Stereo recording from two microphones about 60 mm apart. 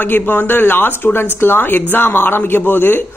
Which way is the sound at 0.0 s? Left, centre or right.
Left.